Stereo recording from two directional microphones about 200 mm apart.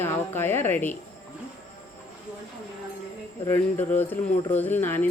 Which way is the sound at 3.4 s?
10° left (ahead or behind).